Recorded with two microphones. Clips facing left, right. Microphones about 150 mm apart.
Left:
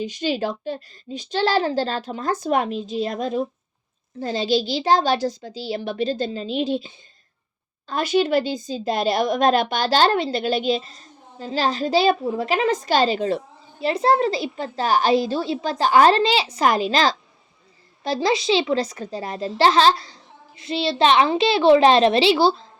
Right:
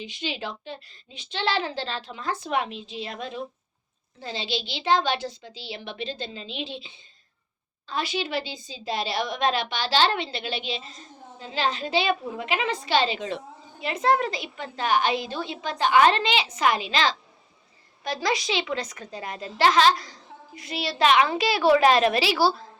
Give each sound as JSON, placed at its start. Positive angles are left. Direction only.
{"t": 0.0, "sound": "a child's voice", "side_deg": 40}